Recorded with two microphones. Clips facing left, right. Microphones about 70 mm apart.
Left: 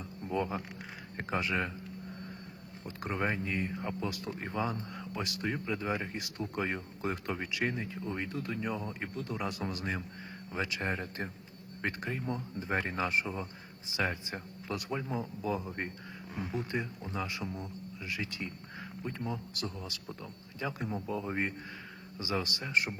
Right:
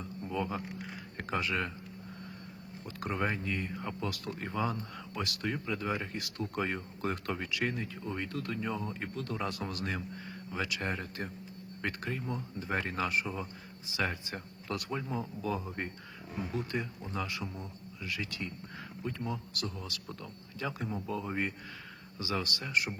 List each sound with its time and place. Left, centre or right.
0.0 s hum: centre
1.1 s speech: left
2.8 s speech: left